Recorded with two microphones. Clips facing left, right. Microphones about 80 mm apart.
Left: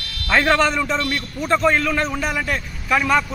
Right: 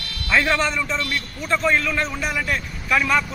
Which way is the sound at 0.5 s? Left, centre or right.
Left.